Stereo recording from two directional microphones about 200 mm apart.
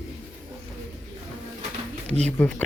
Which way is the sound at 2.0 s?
30° right (ahead or behind).